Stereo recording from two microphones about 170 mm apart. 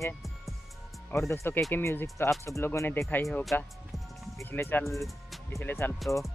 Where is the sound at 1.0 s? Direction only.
15° left (ahead or behind).